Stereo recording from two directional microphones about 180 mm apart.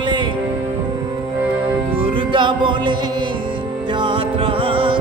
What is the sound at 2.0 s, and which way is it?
Music, 30° right (ahead or behind).